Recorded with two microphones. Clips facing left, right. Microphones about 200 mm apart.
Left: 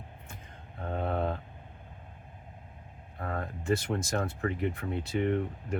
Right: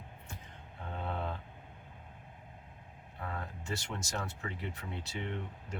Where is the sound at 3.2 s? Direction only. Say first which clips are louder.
Left 6 dB; 50° left (ahead or behind).